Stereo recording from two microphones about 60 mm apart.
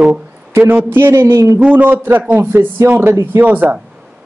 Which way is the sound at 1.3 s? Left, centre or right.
Right.